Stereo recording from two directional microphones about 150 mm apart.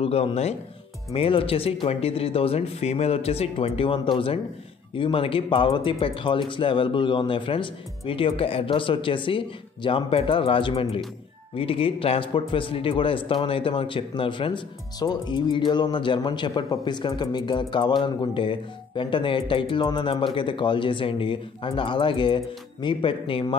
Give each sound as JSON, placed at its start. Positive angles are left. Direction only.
{"t": 0.0, "sound": "a man's voice", "side_deg": 40}